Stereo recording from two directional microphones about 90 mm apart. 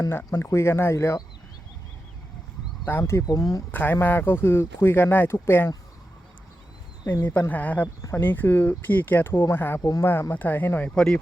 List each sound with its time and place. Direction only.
0.3 s speech: 35° left (ahead or behind)
2.8 s speech: 30° left (ahead or behind)
3.2 s speech: 40° left (ahead or behind)
3.7 s speech: 20° left (ahead or behind)
7.3 s speech: 20° left (ahead or behind)
9.8 s speech: 35° left (ahead or behind)
10.1 s speech: 25° left (ahead or behind)
10.9 s speech: 10° left (ahead or behind)